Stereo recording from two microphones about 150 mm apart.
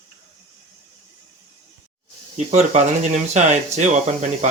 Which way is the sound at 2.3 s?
50° right (ahead or behind).